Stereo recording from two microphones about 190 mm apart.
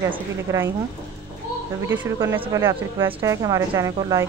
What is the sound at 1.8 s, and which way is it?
A woman's voice, 10° right (ahead or behind).